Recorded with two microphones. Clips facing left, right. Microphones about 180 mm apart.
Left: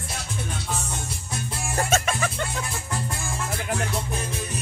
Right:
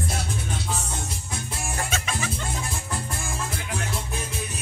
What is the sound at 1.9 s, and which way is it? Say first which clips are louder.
Music: left 5 dB; 55° left (ahead or behind).